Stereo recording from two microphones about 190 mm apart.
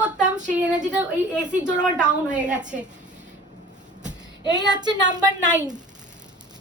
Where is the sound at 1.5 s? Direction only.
40° right (ahead or behind).